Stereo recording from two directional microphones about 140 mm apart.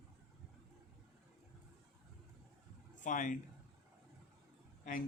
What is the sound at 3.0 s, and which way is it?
Speech, 65° left (ahead or behind).